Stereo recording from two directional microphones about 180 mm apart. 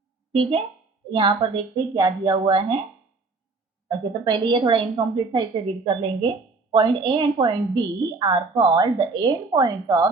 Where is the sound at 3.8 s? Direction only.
25° right (ahead or behind).